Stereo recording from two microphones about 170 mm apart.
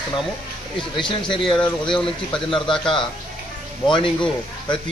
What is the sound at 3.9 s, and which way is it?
Speech, 30° left (ahead or behind).